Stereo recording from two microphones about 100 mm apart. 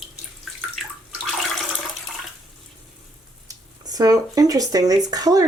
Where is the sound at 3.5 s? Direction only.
35° right (ahead or behind).